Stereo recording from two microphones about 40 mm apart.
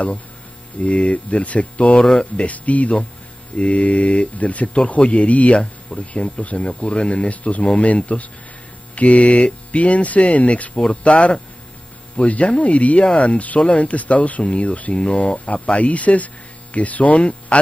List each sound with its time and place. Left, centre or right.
0.7 s speech: left